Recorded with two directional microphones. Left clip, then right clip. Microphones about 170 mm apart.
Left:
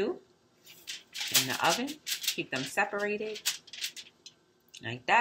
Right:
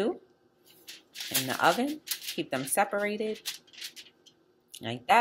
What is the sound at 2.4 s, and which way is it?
Speech, 45° right (ahead or behind).